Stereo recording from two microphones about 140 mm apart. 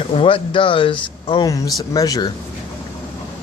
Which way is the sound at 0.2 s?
40° left (ahead or behind).